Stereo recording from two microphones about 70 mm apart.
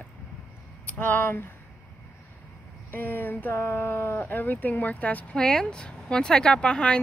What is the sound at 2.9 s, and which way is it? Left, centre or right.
Speech, left.